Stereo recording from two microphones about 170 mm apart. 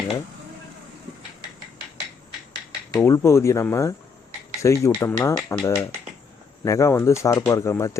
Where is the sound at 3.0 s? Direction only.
15° left (ahead or behind).